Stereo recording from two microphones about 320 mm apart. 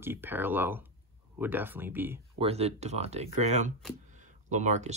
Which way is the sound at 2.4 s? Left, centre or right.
Centre.